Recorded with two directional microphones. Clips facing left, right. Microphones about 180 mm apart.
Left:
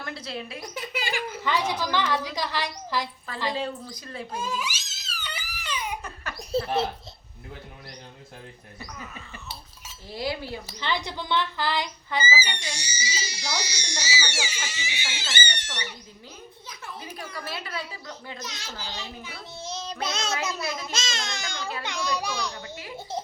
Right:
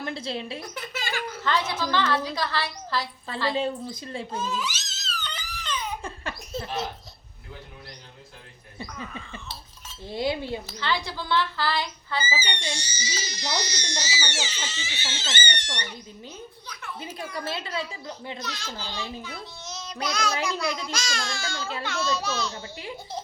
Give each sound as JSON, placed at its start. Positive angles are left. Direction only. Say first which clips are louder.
{"t": 0.0, "sound": "a woman's voice", "louder": "right 4 dB", "side_deg": -25}
{"t": 0.6, "sound": "speech", "louder": "left 2 dB", "side_deg": 10}
{"t": 3.5, "sound": "speech", "louder": "right 3 dB", "side_deg": -25}
{"t": 4.3, "sound": "crying", "louder": "even", "side_deg": 10}
{"t": 6.0, "sound": "baby laughter", "louder": "right 3 dB", "side_deg": -25}
{"t": 6.5, "sound": "a child's voice", "louder": "left 7 dB", "side_deg": 30}
{"t": 10.1, "sound": "speech", "louder": "right 3 dB", "side_deg": -25}
{"t": 10.7, "sound": "speech", "louder": "right 1 dB", "side_deg": 20}
{"t": 17.0, "sound": "speech", "louder": "right 5 dB", "side_deg": -25}
{"t": 18.4, "sound": "speech", "louder": "right 3 dB", "side_deg": 20}
{"t": 19.5, "sound": "child singing", "louder": "left 6 dB", "side_deg": 30}
{"t": 20.4, "sound": "speech", "louder": "right 2 dB", "side_deg": 25}